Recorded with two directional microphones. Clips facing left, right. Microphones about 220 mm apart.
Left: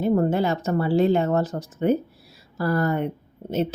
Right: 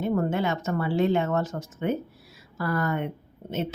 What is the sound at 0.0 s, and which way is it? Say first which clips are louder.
Speech: left 5 dB; 35° left (ahead or behind).